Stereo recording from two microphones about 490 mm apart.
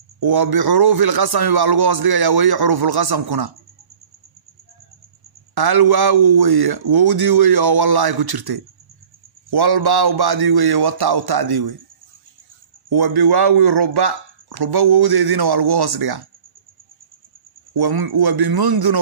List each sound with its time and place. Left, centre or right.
0.2 s a man's voice: right
5.5 s a man's voice: right
12.9 s a man's voice: right
17.7 s a man's voice: right